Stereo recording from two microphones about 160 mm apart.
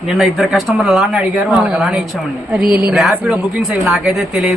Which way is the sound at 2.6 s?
70° right (ahead or behind).